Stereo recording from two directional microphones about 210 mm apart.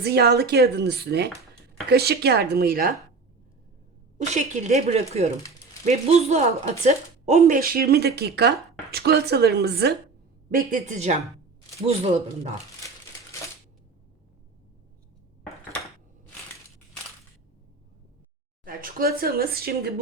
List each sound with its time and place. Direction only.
0.0 s speech: 50° right (ahead or behind)
4.3 s speech: 35° right (ahead or behind)
18.6 s speech: 40° right (ahead or behind)